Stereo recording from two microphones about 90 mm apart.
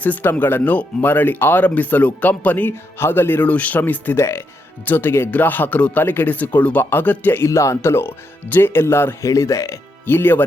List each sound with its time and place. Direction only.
0.0 s speech: 20° left (ahead or behind)
4.2 s speech: 30° left (ahead or behind)
10.1 s speech: 25° left (ahead or behind)